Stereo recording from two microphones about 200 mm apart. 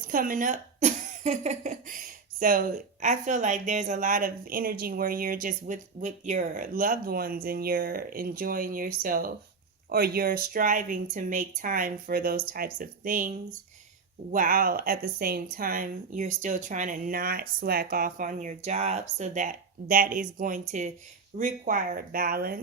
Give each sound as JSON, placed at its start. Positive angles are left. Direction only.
{"t": 0.1, "sound": "speech", "side_deg": -45}
{"t": 14.3, "sound": "speech", "side_deg": -45}